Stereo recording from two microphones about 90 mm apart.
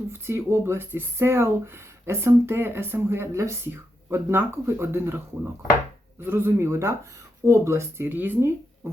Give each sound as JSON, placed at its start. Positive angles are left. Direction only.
{"t": 0.1, "sound": "speech", "side_deg": -25}